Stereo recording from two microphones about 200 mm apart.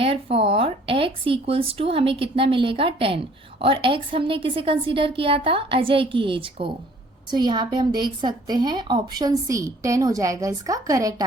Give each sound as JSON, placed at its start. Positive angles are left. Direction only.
{"t": 0.0, "sound": "a woman's voice", "side_deg": -30}